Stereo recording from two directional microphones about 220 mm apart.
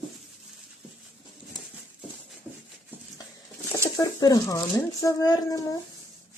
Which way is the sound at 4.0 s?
15° left (ahead or behind).